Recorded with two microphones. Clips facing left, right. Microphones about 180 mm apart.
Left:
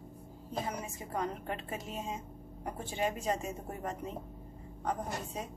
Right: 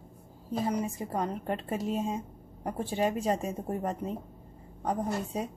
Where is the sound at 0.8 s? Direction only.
35° right (ahead or behind).